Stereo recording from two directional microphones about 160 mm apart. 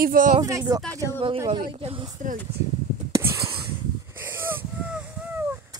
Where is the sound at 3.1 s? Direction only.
20° right (ahead or behind).